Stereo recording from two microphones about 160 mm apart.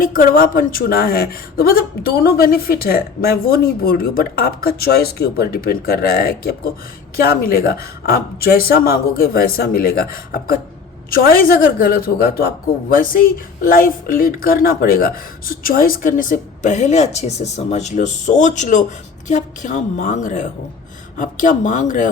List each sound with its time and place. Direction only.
0.0 s a woman's voice: 60° left (ahead or behind)